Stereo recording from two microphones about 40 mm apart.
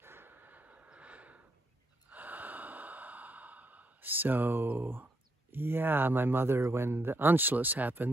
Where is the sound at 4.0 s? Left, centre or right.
Right.